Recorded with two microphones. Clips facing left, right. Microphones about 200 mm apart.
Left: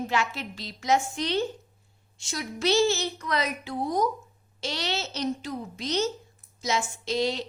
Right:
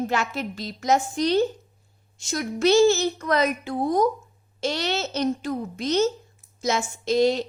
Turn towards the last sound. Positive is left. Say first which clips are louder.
# right 7 dB
turn(degrees=-50)  # may be behind; listen again after turning